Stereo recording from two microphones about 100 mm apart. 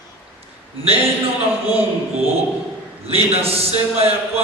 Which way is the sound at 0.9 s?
75° right (ahead or behind).